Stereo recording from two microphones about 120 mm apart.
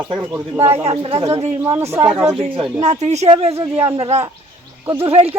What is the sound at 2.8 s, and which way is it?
Speech, 70° right (ahead or behind).